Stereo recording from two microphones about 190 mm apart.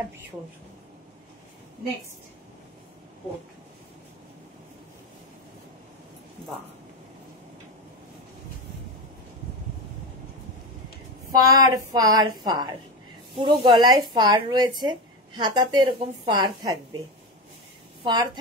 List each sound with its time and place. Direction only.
11.3 s a woman's voice: 20° right (ahead or behind)
18.0 s a woman's voice: 20° right (ahead or behind)